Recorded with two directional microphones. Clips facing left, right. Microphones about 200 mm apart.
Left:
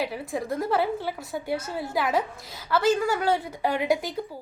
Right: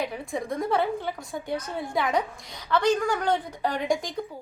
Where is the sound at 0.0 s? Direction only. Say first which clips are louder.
Left 1 dB; 5° left (ahead or behind).